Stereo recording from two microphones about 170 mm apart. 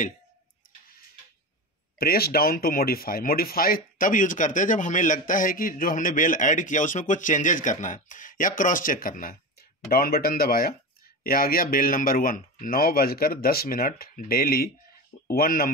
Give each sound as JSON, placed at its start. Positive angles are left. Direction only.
{"t": 2.0, "sound": "speech", "side_deg": 65}